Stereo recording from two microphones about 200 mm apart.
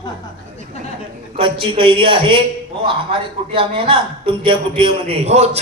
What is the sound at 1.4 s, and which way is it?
A man's voice, 25° right (ahead or behind).